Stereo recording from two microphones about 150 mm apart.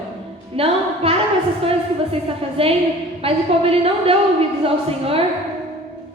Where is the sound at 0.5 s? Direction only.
40° right (ahead or behind).